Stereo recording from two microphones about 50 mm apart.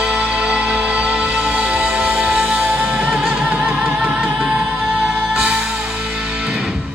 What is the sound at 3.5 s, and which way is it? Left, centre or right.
Music, right.